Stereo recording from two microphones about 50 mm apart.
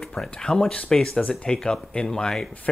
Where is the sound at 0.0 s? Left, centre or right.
Centre.